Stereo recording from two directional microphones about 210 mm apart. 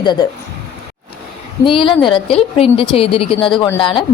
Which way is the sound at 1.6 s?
25° left (ahead or behind).